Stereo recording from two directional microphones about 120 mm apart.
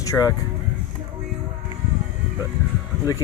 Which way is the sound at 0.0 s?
30° left (ahead or behind).